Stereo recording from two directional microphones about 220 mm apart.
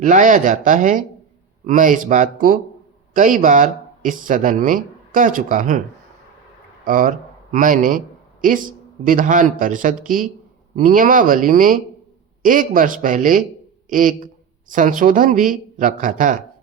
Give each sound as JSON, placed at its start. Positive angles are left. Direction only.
{"t": 0.0, "sound": "speech", "side_deg": -35}
{"t": 6.8, "sound": "a man's voice", "side_deg": -40}